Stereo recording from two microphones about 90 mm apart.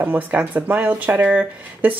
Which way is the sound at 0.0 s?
15° right (ahead or behind).